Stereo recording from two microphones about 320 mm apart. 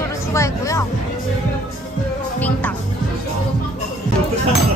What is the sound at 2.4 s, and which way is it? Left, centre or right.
Music, centre.